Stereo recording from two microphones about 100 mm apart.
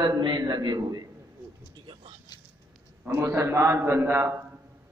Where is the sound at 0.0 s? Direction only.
55° right (ahead or behind).